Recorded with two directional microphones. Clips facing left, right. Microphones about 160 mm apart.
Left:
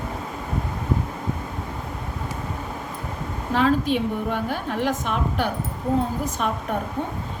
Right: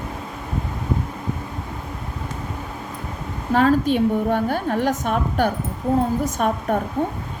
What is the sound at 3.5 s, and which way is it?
A woman's voice, 45° right (ahead or behind).